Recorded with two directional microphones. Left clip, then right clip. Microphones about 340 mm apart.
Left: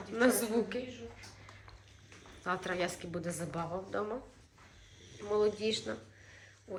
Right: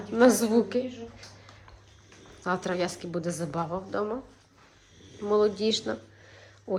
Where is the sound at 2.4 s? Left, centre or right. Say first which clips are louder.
Right 6 dB; centre.